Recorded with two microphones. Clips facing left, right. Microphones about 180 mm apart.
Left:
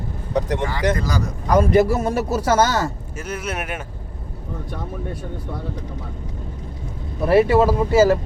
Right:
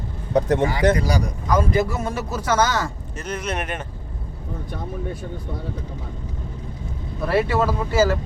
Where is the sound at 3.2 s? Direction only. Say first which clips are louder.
Even; 5° left (ahead or behind).